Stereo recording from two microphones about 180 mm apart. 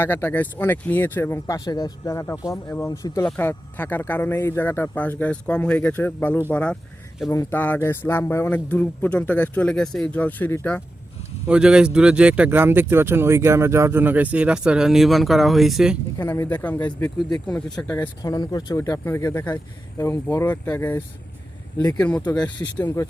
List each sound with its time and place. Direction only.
0.0 s speech: 10° left (ahead or behind)
11.4 s speech: 5° right (ahead or behind)
16.1 s speech: 15° left (ahead or behind)
18.2 s speech: 20° left (ahead or behind)
22.0 s speech: 5° left (ahead or behind)
22.4 s speech: 25° left (ahead or behind)